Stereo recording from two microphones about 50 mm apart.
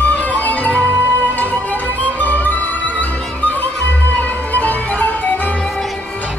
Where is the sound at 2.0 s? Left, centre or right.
Left.